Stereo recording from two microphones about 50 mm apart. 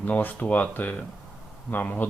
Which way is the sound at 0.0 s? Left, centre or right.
Left.